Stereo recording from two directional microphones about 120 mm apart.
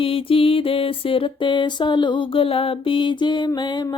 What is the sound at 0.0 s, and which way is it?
Music, 50° left (ahead or behind).